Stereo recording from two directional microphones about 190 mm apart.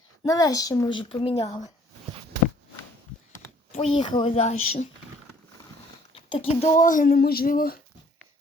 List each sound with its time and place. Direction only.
0.2 s a child's voice: 20° left (ahead or behind)
3.7 s speech: 35° left (ahead or behind)
6.3 s speech: 30° left (ahead or behind)
6.7 s a sound: 45° left (ahead or behind)